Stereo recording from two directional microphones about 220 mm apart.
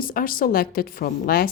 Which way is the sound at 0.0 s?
40° left (ahead or behind).